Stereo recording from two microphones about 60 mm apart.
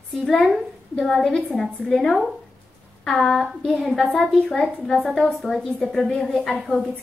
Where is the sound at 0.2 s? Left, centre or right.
Centre.